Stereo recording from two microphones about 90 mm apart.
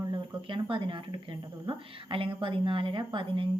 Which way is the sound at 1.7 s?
85° right.